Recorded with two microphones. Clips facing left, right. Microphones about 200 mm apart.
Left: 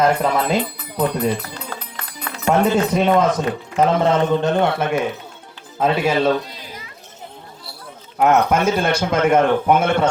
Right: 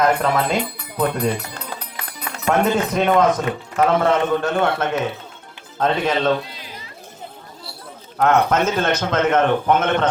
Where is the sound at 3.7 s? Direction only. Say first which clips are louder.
Left 1 dB; 20° left (ahead or behind).